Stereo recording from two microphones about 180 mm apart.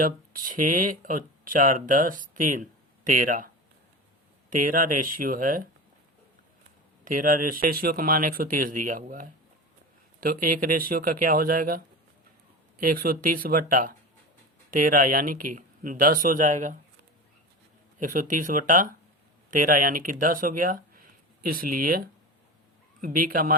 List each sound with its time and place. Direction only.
0.0 s speech: 50° right (ahead or behind)
4.4 s speech: 45° right (ahead or behind)
7.0 s speech: 50° right (ahead or behind)
12.8 s speech: 55° right (ahead or behind)
18.0 s speech: 45° right (ahead or behind)